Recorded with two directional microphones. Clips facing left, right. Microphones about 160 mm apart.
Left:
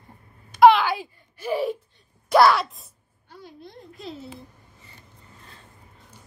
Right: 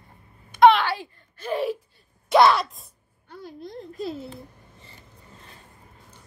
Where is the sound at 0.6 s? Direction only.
5° left (ahead or behind).